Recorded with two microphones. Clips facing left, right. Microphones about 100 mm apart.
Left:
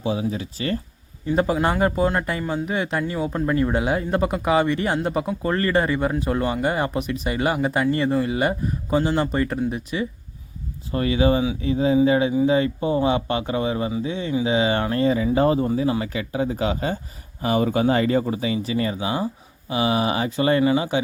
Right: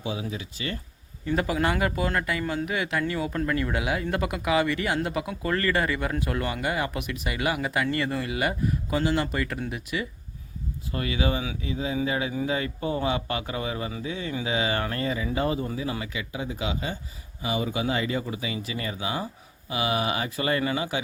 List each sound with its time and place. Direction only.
0.0 s speech: 35° left (ahead or behind)
2.4 s speech: 15° left (ahead or behind)
2.6 s speech: 30° left (ahead or behind)